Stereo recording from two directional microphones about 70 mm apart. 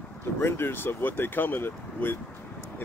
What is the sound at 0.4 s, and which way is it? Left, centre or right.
Speech, left.